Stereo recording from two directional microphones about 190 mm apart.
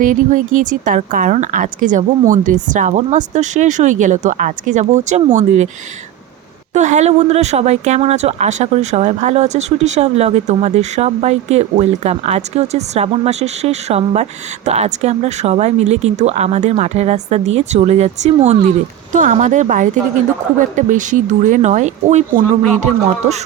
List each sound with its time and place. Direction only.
0.0 s speech: 40° right (ahead or behind)
6.7 s speech: 40° right (ahead or behind)